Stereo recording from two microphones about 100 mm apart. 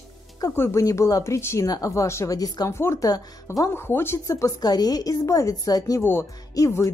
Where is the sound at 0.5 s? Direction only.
25° left (ahead or behind).